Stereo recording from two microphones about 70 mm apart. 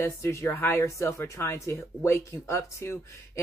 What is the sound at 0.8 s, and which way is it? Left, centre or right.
Speech, left.